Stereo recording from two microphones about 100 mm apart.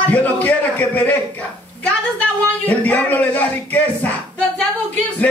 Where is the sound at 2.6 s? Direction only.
15° left (ahead or behind).